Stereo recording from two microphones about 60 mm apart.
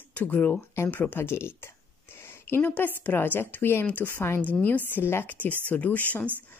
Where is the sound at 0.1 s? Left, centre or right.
Left.